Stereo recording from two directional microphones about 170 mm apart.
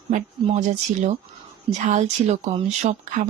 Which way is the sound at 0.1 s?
45° right (ahead or behind).